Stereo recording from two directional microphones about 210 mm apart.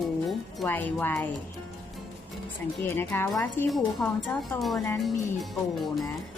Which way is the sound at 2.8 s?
10° left (ahead or behind).